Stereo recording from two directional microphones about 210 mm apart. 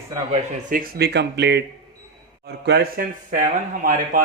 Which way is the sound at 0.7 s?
45° right (ahead or behind).